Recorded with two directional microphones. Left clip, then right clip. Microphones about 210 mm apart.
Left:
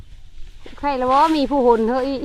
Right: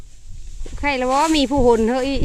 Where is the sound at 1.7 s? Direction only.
30° right (ahead or behind).